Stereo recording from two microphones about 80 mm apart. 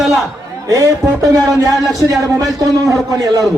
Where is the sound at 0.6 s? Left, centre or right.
Right.